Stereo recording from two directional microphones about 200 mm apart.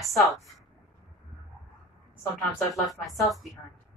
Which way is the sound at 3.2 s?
Centre (ahead or behind).